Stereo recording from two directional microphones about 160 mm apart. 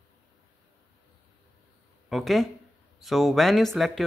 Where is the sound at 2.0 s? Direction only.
Centre (ahead or behind).